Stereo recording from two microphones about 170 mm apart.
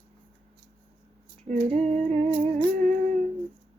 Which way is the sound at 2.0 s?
40° right (ahead or behind).